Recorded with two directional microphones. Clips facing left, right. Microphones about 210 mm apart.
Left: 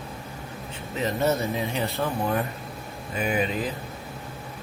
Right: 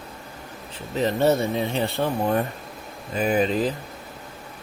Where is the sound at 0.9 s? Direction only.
30° right (ahead or behind).